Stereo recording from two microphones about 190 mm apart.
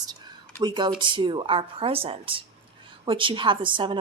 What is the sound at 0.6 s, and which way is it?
A woman's voice, 25° right (ahead or behind).